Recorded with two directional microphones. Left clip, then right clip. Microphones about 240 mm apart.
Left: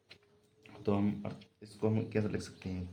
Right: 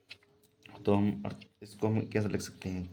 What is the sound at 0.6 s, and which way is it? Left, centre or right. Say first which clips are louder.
Speech: right 4 dB; right.